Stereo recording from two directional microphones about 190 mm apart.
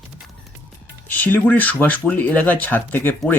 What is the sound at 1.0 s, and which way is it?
Speech, 10° left (ahead or behind).